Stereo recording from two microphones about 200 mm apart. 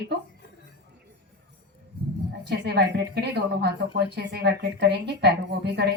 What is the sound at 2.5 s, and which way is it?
A woman's voice, 55° right (ahead or behind).